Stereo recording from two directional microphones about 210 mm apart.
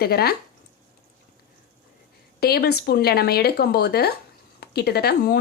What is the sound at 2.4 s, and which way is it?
A woman's voice, 50° left (ahead or behind).